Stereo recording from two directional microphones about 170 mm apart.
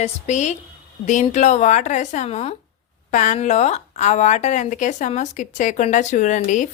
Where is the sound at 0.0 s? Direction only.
45° left (ahead or behind).